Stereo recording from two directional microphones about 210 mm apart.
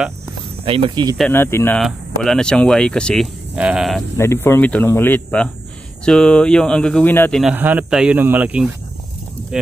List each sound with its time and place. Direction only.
0.7 s speech: 25° right (ahead or behind)
1.1 s speech: 5° left (ahead or behind)
4.2 s speech: 10° left (ahead or behind)
7.5 s speech: 10° right (ahead or behind)